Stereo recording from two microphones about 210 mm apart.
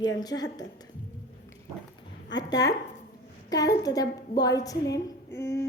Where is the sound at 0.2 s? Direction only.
20° left (ahead or behind).